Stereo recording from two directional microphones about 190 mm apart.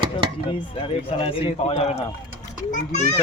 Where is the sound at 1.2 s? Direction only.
30° left (ahead or behind).